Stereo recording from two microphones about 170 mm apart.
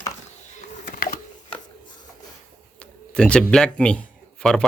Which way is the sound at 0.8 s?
50° left (ahead or behind).